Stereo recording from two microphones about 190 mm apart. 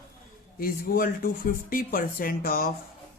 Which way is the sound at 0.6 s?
50° left (ahead or behind).